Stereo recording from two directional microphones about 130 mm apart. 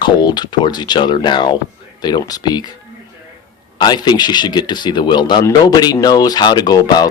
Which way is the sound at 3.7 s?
30° left (ahead or behind).